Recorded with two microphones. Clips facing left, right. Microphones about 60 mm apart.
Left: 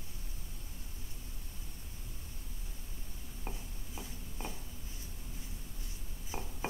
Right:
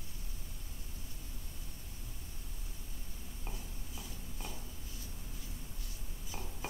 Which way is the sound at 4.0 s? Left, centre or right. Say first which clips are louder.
Left 4 dB; left.